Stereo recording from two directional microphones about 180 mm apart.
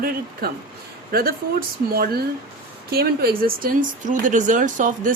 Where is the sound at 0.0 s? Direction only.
55° right (ahead or behind).